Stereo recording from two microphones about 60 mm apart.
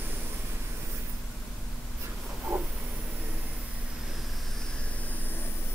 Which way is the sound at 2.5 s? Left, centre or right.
Right.